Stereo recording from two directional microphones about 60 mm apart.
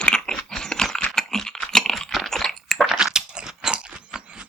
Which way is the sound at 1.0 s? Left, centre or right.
Centre.